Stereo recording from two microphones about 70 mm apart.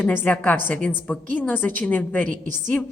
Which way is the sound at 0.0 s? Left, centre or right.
Left.